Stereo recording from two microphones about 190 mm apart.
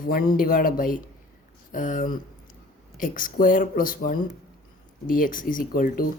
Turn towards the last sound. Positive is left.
turn(degrees=45)  # may be behind; listen again after turning